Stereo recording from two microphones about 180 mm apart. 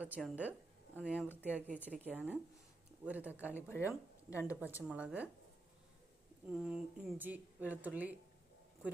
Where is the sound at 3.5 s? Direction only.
15° left (ahead or behind).